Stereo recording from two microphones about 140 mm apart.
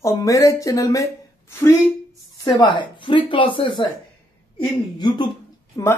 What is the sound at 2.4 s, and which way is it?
A woman's voice, 30° left (ahead or behind).